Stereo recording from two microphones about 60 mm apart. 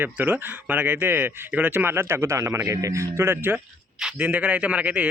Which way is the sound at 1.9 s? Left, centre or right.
Right.